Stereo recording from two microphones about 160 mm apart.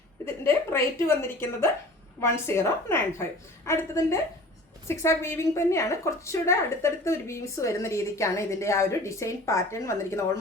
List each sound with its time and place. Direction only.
0.3 s a woman's voice: 15° left (ahead or behind)